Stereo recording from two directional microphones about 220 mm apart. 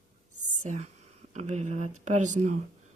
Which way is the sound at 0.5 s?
35° right (ahead or behind).